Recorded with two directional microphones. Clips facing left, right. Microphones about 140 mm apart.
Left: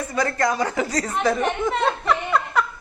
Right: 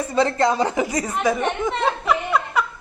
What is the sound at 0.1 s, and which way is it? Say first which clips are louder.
Speech: right 4 dB; 25° right (ahead or behind).